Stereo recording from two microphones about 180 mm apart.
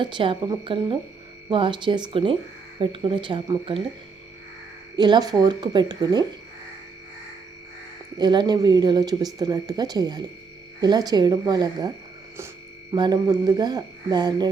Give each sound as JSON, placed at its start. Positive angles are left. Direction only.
{"t": 0.0, "sound": "speech", "side_deg": -30}
{"t": 4.9, "sound": "speech", "side_deg": -25}
{"t": 8.2, "sound": "speech", "side_deg": -25}
{"t": 12.9, "sound": "speech", "side_deg": -20}